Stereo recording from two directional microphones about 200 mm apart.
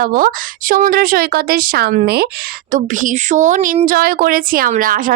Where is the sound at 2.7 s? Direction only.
40° right (ahead or behind).